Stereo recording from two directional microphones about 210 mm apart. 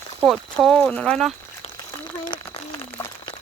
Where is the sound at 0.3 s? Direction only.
Centre (ahead or behind).